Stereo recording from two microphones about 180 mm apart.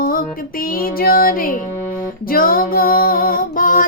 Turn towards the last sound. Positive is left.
turn(degrees=50)  # may be behind; listen again after turning